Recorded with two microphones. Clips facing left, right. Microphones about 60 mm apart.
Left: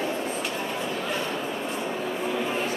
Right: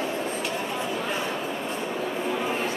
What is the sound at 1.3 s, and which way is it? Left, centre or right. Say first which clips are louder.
Bow-wow: even; centre.